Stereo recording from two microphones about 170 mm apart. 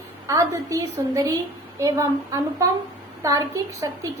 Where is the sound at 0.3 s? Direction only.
20° right (ahead or behind).